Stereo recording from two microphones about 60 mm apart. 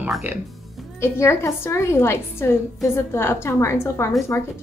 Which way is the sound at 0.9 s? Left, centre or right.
Left.